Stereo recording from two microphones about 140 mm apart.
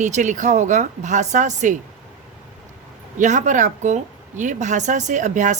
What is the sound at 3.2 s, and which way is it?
A woman's voice, 60° right (ahead or behind).